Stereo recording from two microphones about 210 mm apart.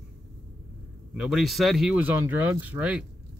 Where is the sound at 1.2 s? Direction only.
Centre (ahead or behind).